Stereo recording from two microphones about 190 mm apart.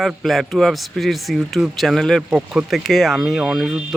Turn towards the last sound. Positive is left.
turn(degrees=0)  # may be behind; listen again after turning